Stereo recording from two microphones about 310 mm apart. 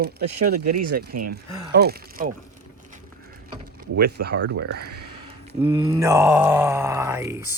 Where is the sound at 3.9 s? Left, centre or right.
Right.